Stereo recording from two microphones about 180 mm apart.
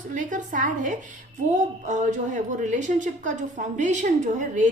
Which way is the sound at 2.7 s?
45° right (ahead or behind).